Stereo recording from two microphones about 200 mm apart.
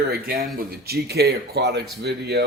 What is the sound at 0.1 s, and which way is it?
Speech, 50° right (ahead or behind).